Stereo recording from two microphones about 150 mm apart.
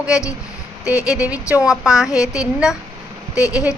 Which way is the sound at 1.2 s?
10° right (ahead or behind).